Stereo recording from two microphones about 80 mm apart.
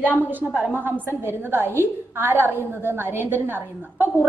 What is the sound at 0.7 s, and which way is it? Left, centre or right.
A woman's voice, right.